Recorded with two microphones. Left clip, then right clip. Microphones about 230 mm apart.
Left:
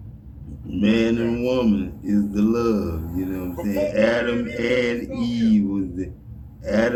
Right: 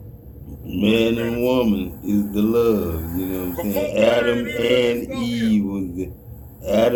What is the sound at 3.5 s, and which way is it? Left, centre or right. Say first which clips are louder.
Speech: left 1 dB; right.